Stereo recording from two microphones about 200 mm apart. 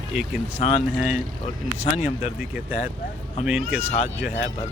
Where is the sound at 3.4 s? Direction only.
5° right (ahead or behind).